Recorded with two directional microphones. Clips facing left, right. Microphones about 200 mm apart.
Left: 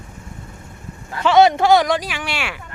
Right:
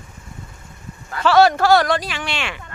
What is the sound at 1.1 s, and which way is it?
Speech, 20° left (ahead or behind).